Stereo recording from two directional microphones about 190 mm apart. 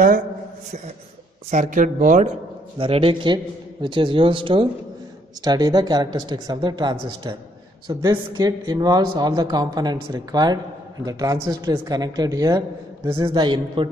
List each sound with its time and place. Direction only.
1.5 s speech: 45° right (ahead or behind)
2.8 s a man's voice: 30° right (ahead or behind)